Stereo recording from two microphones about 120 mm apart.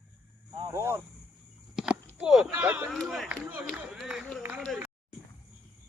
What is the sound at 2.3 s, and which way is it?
Speech, 5° right (ahead or behind).